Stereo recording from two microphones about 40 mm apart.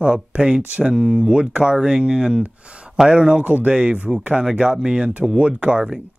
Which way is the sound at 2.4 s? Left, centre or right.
Right.